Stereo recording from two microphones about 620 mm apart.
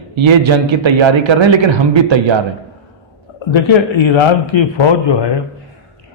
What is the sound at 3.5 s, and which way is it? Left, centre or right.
A man's voice, left.